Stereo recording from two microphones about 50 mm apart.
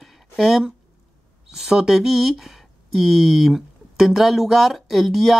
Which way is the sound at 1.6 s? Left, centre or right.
Centre.